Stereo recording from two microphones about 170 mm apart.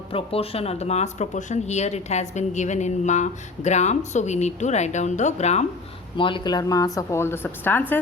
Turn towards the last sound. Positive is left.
turn(degrees=10)  # may be behind; listen again after turning